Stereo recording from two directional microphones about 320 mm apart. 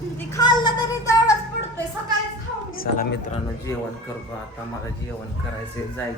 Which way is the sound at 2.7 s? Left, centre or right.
Left.